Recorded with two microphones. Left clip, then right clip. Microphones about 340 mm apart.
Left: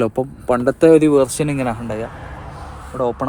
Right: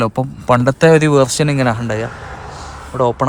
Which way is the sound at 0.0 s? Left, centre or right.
Right.